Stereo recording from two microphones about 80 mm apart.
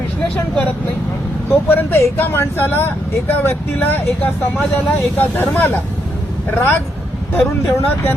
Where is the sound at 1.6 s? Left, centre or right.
Left.